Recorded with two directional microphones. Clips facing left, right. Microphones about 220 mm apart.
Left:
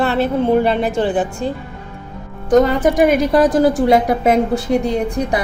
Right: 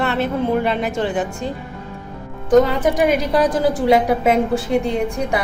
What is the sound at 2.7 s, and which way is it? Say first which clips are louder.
A woman's voice: left 3 dB; 45° left (ahead or behind).